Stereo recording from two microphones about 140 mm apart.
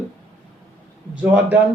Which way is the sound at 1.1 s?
10° right (ahead or behind).